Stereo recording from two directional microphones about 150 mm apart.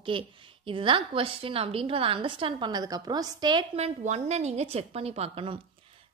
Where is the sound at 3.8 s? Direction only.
45° right (ahead or behind).